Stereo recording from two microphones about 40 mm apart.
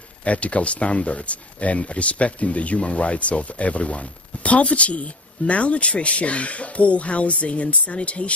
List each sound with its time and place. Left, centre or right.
0.2 s speech: left